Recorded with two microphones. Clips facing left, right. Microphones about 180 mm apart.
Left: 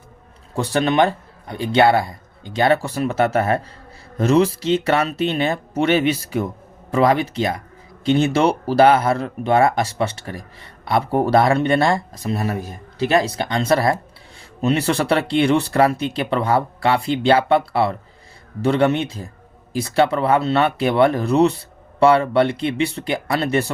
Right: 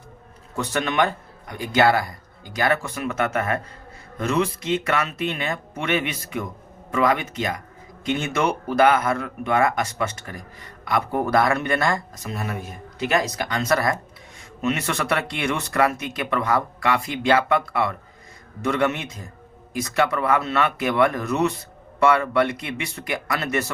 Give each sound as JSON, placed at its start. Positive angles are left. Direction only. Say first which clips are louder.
{"t": 0.5, "sound": "speech", "louder": "left 6 dB", "side_deg": 30}